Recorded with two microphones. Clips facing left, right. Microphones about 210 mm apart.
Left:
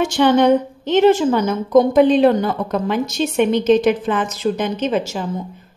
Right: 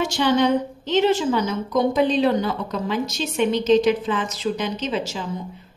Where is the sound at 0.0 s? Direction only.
55° left (ahead or behind).